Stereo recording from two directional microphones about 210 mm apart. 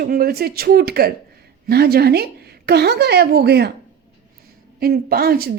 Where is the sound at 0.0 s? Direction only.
45° right (ahead or behind).